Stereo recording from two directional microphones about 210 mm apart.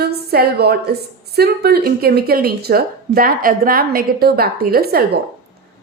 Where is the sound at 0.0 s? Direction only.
50° right (ahead or behind).